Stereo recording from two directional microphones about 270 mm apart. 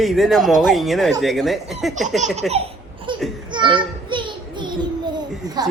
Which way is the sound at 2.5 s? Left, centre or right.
Right.